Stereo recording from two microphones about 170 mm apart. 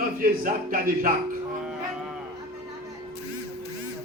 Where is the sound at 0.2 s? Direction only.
55° right (ahead or behind).